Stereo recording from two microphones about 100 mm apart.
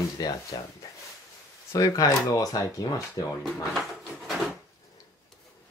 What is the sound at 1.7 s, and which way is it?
Speech, 35° left (ahead or behind).